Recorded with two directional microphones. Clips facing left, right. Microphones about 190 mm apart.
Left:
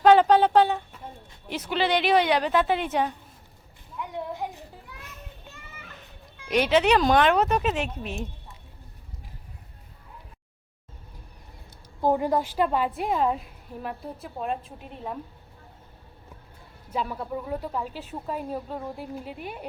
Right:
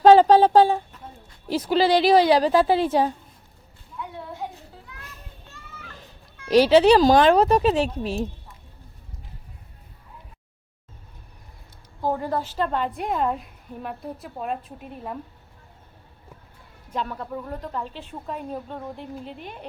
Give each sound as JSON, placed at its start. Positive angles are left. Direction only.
{"t": 0.0, "sound": "speech", "side_deg": -35}
{"t": 4.4, "sound": "a sound", "side_deg": 10}
{"t": 6.5, "sound": "speech", "side_deg": -30}
{"t": 12.0, "sound": "a woman's voice", "side_deg": 15}
{"t": 16.9, "sound": "a woman's voice", "side_deg": 5}